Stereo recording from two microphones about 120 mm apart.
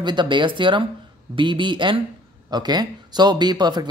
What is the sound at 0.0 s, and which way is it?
Speech, 40° right (ahead or behind).